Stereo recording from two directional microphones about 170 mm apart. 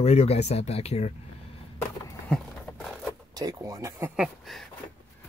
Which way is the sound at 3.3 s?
20° right (ahead or behind).